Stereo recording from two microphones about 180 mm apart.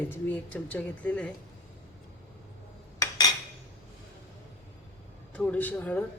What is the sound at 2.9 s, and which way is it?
Cutlery, 20° left (ahead or behind).